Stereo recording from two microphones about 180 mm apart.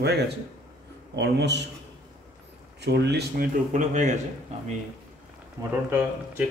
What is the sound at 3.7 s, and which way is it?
Speech, 40° right (ahead or behind).